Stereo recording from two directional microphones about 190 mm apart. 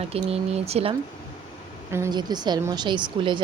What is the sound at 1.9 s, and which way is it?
A woman's voice, 20° right (ahead or behind).